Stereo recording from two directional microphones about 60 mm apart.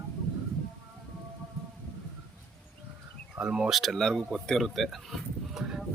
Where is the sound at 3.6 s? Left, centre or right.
Centre.